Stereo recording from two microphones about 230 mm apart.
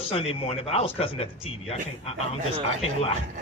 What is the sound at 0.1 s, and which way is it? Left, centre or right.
A child's voice, left.